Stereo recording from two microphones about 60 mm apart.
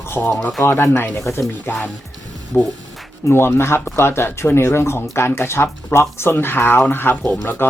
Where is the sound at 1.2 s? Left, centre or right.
Left.